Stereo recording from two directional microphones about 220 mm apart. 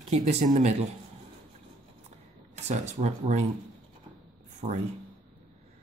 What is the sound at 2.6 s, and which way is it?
Speech, 30° right (ahead or behind).